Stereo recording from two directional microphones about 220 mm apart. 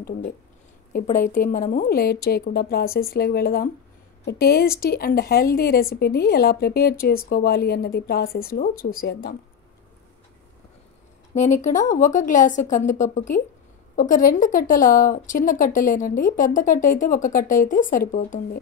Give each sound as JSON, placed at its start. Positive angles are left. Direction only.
{"t": 0.9, "sound": "a woman's voice", "side_deg": 35}
{"t": 11.3, "sound": "speech", "side_deg": 35}